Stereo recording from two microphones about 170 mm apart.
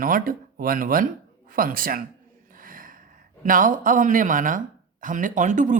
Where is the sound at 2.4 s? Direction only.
55° right (ahead or behind).